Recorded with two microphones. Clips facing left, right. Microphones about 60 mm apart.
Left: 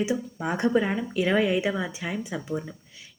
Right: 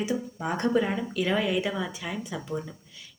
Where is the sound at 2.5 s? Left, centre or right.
Centre.